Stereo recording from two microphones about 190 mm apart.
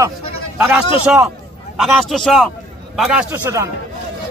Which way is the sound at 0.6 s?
5° right (ahead or behind).